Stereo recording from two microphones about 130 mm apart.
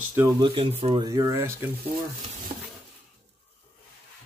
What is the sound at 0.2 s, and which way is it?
Speech, 15° right (ahead or behind).